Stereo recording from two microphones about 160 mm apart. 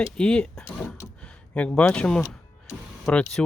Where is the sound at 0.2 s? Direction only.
5° left (ahead or behind).